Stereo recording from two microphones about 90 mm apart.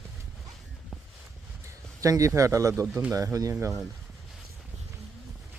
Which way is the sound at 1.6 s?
40° right (ahead or behind).